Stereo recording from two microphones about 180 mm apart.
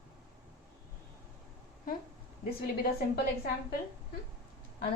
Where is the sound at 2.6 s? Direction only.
60° left (ahead or behind).